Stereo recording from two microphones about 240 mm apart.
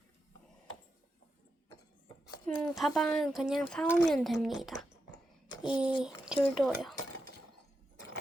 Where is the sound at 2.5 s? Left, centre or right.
Centre.